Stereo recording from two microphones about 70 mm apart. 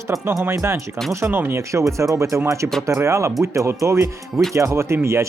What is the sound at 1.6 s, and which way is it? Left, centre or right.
Speech, right.